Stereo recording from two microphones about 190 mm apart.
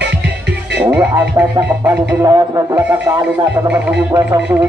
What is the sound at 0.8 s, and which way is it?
Speech, 10° right (ahead or behind).